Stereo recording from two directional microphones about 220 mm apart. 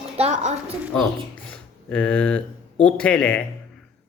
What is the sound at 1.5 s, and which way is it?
Speech, 5° left (ahead or behind).